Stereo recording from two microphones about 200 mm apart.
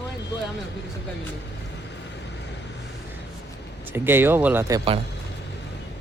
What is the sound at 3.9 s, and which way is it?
Speech, 10° right (ahead or behind).